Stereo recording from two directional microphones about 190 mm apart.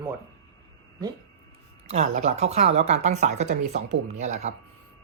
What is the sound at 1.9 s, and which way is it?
Speech, 35° right (ahead or behind).